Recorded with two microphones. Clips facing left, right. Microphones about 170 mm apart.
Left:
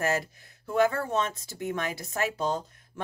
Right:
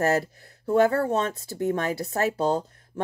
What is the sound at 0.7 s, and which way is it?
A woman's voice, 35° right (ahead or behind).